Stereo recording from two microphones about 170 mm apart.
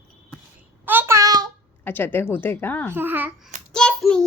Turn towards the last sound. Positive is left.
turn(degrees=5)  # may be behind; listen again after turning